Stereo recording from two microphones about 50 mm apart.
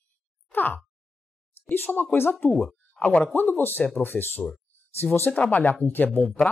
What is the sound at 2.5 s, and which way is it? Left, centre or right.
Speech, centre.